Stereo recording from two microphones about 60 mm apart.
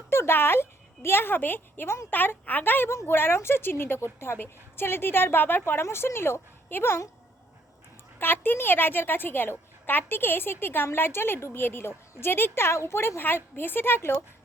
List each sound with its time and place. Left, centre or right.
0.1 s a woman's voice: left
8.2 s a woman's voice: left